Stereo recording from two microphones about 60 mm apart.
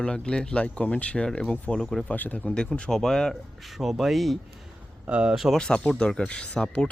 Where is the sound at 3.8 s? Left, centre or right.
Centre.